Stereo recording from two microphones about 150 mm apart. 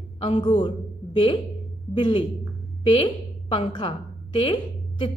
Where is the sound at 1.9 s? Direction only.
35° left (ahead or behind).